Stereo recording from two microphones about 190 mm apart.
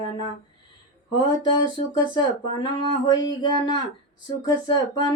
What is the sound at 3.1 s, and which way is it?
Speech, 20° left (ahead or behind).